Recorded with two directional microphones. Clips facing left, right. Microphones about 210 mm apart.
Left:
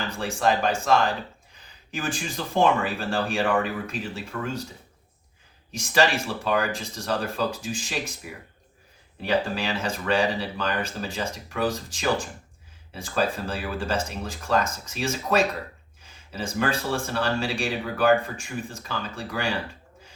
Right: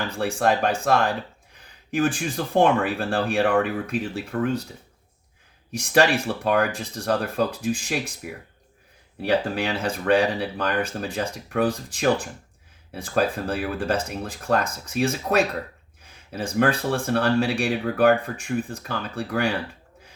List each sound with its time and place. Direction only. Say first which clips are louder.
0.2 s speech: right 2 dB; 60° right (ahead or behind)
5.7 s speech: right 3 dB; 60° right (ahead or behind)
9.2 s speech: right 2 dB; 60° right (ahead or behind)